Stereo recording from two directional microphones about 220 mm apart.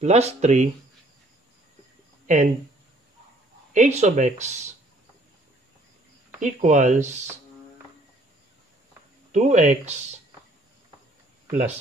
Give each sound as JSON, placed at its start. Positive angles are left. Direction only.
{"t": 0.0, "sound": "speech", "side_deg": -30}
{"t": 2.2, "sound": "speech", "side_deg": -35}
{"t": 3.7, "sound": "speech", "side_deg": -30}
{"t": 6.4, "sound": "speech", "side_deg": -35}
{"t": 9.3, "sound": "speech", "side_deg": -35}